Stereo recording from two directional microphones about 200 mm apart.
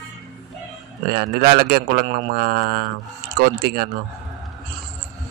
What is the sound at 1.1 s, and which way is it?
Speech, 50° right (ahead or behind).